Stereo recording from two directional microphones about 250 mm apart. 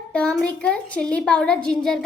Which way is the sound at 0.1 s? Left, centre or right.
Centre.